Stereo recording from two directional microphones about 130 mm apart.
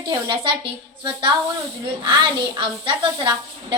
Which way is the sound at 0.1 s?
40° right (ahead or behind).